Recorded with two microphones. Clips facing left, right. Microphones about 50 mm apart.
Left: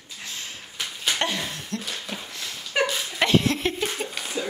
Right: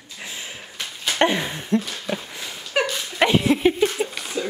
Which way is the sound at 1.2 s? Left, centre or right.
Right.